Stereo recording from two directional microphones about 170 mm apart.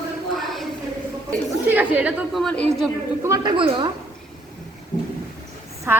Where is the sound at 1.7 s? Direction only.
10° right (ahead or behind).